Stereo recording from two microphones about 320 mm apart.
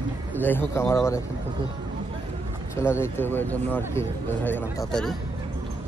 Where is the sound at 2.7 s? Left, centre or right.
Centre.